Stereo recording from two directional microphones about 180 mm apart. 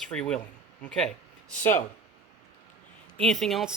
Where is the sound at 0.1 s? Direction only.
5° left (ahead or behind).